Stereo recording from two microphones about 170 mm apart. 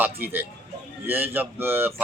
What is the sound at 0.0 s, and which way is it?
Speech, 10° right (ahead or behind).